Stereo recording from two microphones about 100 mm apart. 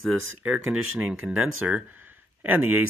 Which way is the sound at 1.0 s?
10° right (ahead or behind).